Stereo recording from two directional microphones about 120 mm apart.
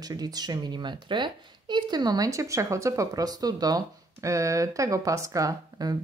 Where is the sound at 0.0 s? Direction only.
35° right (ahead or behind).